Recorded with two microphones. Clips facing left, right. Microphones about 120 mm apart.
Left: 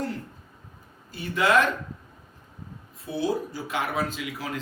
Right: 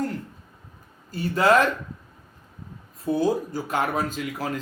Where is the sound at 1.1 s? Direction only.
40° right (ahead or behind).